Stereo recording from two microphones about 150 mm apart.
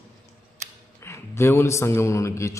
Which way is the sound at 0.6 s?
55° right (ahead or behind).